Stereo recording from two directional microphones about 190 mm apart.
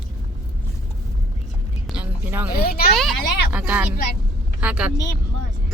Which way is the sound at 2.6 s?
55° left (ahead or behind).